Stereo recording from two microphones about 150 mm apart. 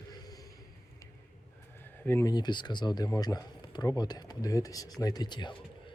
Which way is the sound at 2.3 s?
30° left (ahead or behind).